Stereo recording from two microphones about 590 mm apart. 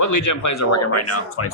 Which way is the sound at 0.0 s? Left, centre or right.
Left.